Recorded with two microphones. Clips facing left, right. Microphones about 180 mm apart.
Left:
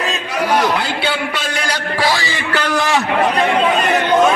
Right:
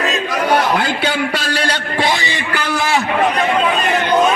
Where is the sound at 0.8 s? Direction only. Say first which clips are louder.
Right 2 dB; 45° right (ahead or behind); by 2.7 s 10° right (ahead or behind).